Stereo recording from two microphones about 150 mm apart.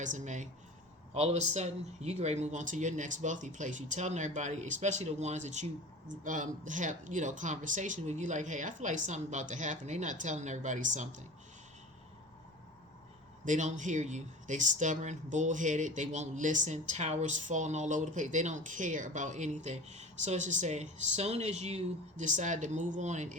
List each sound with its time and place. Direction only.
0.0 s speech: 55° right (ahead or behind)
13.4 s speech: 55° right (ahead or behind)